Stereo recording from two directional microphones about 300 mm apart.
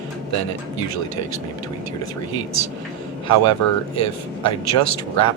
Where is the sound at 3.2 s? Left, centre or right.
Left.